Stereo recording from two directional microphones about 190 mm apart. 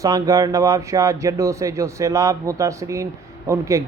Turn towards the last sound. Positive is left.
turn(degrees=-15)  # may be behind; listen again after turning